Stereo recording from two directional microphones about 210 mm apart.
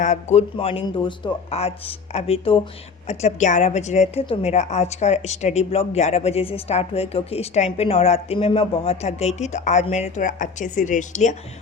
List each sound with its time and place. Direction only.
0.0 s a woman's voice: 35° left (ahead or behind)